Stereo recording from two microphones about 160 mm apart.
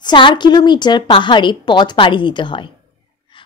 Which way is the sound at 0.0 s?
30° left (ahead or behind).